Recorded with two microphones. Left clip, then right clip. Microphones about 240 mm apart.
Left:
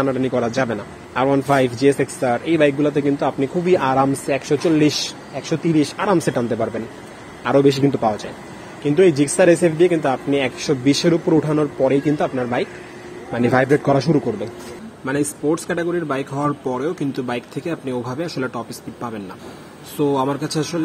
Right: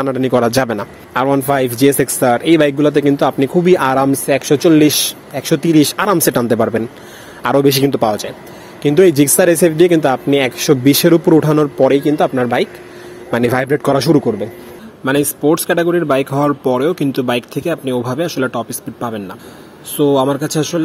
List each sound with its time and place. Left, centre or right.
0.0 s a man's voice: right